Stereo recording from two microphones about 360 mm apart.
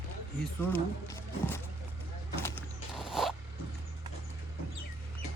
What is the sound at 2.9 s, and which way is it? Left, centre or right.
Zipper, centre.